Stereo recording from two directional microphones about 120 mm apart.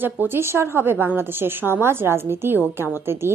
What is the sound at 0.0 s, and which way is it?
A woman's voice, 20° right (ahead or behind).